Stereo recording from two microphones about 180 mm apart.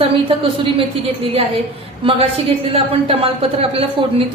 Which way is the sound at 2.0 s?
30° right (ahead or behind).